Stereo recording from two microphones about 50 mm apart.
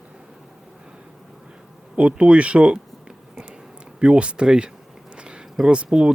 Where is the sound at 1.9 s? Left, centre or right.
Right.